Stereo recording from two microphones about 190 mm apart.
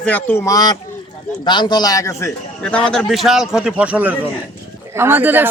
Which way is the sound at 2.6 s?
5° left (ahead or behind).